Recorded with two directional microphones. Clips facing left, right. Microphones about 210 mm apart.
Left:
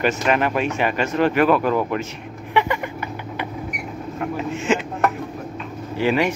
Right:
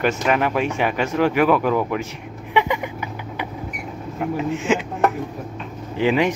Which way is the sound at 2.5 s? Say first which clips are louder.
Even; 15° right (ahead or behind).